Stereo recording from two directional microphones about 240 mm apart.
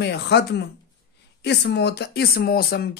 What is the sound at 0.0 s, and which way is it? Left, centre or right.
Speech, left.